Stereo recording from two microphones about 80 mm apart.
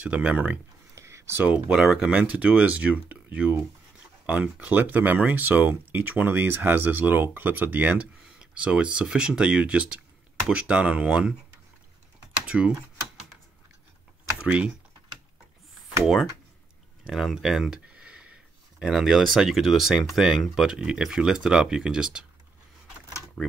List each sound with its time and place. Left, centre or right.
0.0 s speech: centre
0.9 s a sound: right
1.4 s speech: centre
12.4 s speech: centre
14.4 s speech: centre
16.0 s speech: centre
17.8 s speech: centre